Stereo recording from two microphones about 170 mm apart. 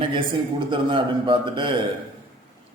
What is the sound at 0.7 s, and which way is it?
A man's voice, 30° right (ahead or behind).